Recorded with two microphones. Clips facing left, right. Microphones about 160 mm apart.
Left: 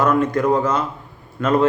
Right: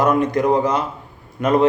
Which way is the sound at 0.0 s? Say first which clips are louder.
Right 1 dB; 15° right (ahead or behind).